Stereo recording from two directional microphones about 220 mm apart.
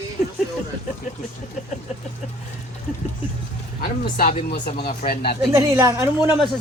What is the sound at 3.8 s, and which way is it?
Speech, 40° left (ahead or behind).